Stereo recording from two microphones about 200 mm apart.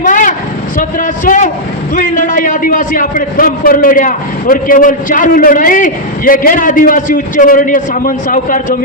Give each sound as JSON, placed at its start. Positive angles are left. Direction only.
{"t": 0.0, "sound": "vehicle", "side_deg": 40}
{"t": 0.8, "sound": "a man's voice", "side_deg": 40}